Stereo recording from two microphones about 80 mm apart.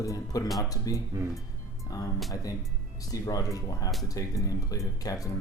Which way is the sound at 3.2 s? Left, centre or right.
Left.